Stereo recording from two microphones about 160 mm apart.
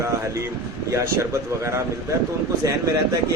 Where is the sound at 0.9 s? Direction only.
20° right (ahead or behind).